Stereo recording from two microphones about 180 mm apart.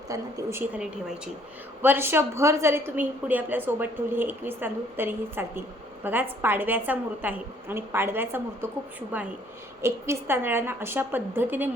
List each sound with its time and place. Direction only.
0.1 s a woman's voice: 20° right (ahead or behind)
0.8 s a woman's voice: 5° right (ahead or behind)